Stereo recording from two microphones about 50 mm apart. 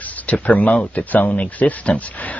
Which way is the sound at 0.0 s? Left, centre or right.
Left.